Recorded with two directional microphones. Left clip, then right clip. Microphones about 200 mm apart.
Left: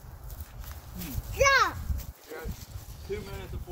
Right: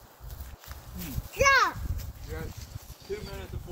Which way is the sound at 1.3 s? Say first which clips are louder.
Right 1 dB; 45° right (ahead or behind).